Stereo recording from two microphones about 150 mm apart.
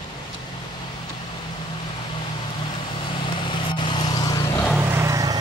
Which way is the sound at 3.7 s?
30° left (ahead or behind).